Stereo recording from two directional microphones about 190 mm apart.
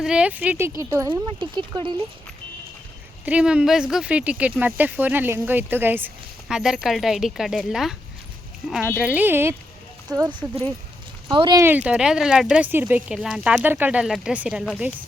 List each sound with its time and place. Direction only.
0.0 s speech: 5° right (ahead or behind)
1.4 s speech: 25° right (ahead or behind)
3.2 s speech: 5° right (ahead or behind)
9.0 s speech: 5° right (ahead or behind); by 11.6 s 25° right (ahead or behind)
11.6 s speech: 10° right (ahead or behind)